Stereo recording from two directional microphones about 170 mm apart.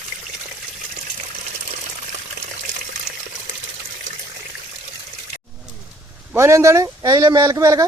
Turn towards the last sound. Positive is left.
turn(degrees=-20)  # may be behind; listen again after turning